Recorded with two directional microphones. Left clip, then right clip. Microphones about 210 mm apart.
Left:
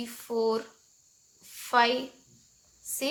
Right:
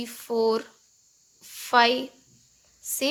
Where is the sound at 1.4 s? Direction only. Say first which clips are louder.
Right 4 dB; 40° right (ahead or behind).